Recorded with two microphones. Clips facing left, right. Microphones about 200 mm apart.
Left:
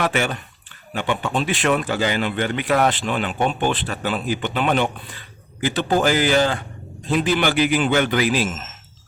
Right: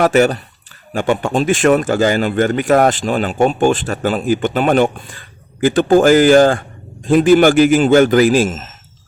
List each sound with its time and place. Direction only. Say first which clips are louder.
0.0 s speech: right 10 dB; 40° right (ahead or behind)